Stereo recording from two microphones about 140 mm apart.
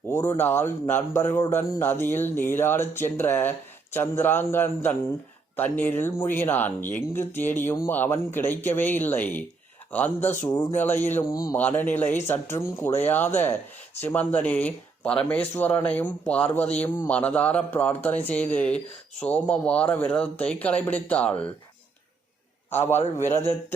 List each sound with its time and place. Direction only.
0.1 s speech: 20° left (ahead or behind)
22.7 s speech: 15° left (ahead or behind)